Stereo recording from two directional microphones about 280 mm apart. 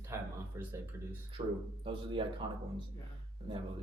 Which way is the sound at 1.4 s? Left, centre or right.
Right.